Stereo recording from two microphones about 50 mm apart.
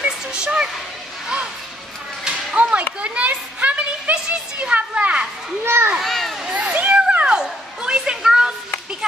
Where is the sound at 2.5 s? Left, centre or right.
Right.